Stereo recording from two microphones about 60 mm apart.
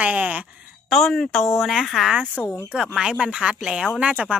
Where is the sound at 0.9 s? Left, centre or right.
Centre.